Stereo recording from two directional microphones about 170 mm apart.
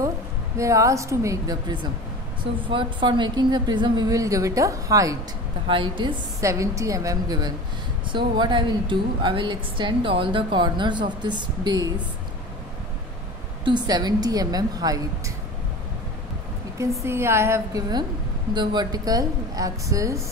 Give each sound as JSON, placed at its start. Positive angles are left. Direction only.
{"t": 0.6, "sound": "a woman's voice", "side_deg": -20}
{"t": 6.4, "sound": "a woman's voice", "side_deg": -20}
{"t": 13.7, "sound": "a woman's voice", "side_deg": -25}
{"t": 17.0, "sound": "a woman's voice", "side_deg": -15}